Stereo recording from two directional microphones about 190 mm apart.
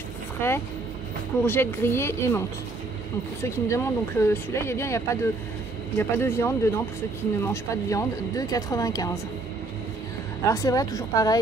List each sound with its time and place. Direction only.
0.4 s speech: 10° left (ahead or behind)
3.4 s speech: 15° left (ahead or behind)
10.5 s speech: 15° left (ahead or behind)